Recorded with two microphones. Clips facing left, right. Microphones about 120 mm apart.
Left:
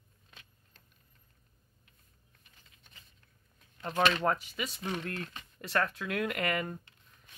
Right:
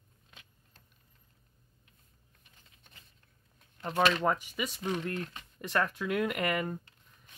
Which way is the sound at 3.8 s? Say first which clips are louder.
Right 1 dB; 5° right (ahead or behind).